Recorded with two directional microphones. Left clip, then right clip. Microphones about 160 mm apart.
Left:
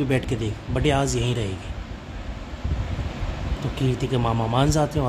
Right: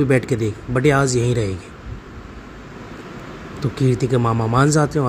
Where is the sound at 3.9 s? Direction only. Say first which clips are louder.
Right 5 dB; 25° right (ahead or behind).